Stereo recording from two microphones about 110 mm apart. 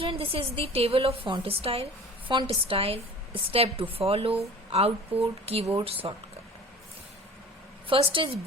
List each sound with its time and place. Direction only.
0.0 s a woman's voice: 55° right (ahead or behind)
7.9 s a woman's voice: 50° right (ahead or behind)